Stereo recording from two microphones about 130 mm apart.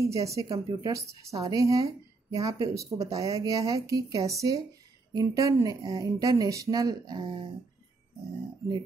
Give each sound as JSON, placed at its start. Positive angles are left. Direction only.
{"t": 0.0, "sound": "a woman's voice", "side_deg": -25}